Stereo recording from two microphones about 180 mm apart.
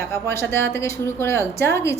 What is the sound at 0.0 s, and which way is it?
A woman's voice, 15° left (ahead or behind).